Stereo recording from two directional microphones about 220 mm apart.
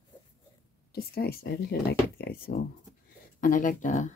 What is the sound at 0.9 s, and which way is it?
Speech, 45° left (ahead or behind).